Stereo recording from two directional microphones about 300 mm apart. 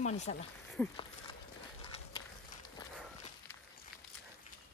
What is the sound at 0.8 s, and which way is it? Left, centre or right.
Speech, centre.